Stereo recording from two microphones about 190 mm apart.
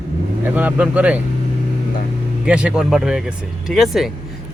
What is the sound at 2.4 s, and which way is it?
Speech, 5° right (ahead or behind).